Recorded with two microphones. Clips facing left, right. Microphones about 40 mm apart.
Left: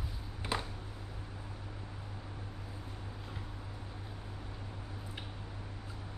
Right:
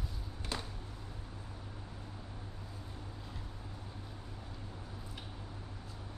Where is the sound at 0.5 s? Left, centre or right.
Centre.